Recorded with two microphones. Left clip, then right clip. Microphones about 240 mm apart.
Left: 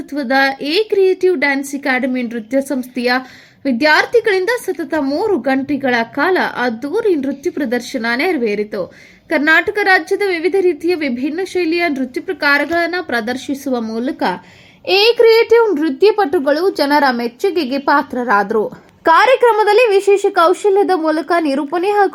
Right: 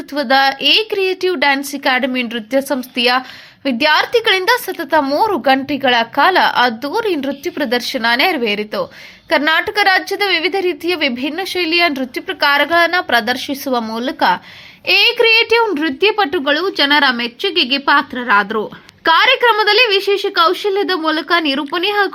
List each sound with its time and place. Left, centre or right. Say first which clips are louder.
0.1 s a woman's voice: right 2 dB; centre
15.4 s a woman's voice: left 2 dB; right
15.8 s a woman's voice: left 2 dB; centre
16.4 s a woman's voice: even; right